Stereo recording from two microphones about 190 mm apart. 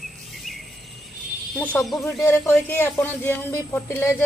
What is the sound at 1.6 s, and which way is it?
Speech, 5° left (ahead or behind).